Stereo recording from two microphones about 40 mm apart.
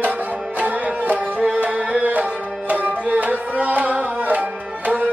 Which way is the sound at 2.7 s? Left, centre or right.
Right.